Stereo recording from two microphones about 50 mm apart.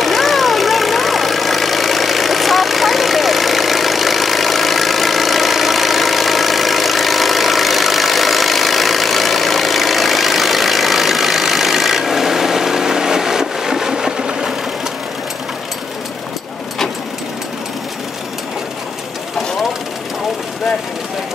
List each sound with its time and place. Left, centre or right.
0.0 s vehicle: centre